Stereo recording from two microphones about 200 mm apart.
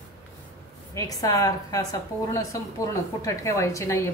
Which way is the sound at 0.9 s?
15° left (ahead or behind).